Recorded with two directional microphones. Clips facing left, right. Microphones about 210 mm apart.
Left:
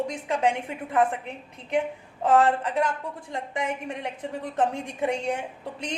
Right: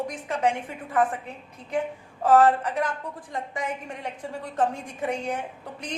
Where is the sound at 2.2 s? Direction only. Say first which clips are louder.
Right 2 dB; 25° left (ahead or behind).